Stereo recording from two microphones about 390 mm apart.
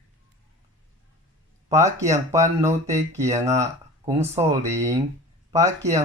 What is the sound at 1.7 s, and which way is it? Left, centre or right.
Speech, centre.